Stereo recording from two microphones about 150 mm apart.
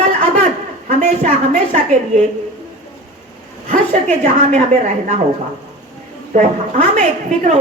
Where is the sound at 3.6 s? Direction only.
50° right (ahead or behind).